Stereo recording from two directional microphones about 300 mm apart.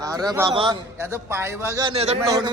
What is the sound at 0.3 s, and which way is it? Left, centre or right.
A man's voice, centre.